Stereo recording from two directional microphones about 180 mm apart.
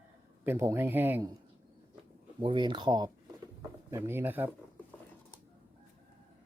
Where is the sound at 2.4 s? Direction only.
25° right (ahead or behind).